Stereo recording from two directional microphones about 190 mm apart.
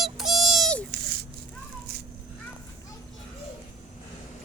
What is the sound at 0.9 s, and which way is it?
Rattle, 55° right (ahead or behind).